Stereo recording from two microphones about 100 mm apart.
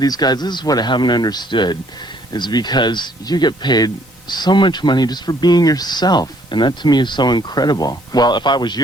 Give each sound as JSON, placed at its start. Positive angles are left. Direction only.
{"t": 0.0, "sound": "speech", "side_deg": 40}